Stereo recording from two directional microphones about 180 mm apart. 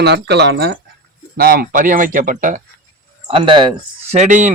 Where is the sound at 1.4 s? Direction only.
55° right (ahead or behind).